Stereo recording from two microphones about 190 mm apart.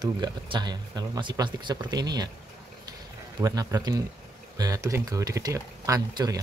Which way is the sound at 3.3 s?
20° right (ahead or behind).